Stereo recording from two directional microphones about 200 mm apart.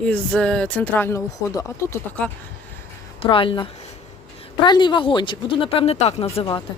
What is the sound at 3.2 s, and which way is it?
Speech, 25° left (ahead or behind).